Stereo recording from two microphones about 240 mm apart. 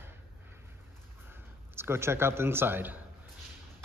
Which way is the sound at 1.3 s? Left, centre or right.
Centre.